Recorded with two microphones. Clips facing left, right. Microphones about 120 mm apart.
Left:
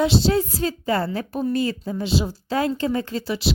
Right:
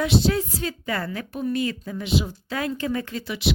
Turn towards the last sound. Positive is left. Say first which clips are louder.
# left 2 dB
turn(degrees=35)  # may be behind; listen again after turning